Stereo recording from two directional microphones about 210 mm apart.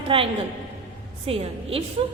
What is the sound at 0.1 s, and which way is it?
Speech, 25° right (ahead or behind).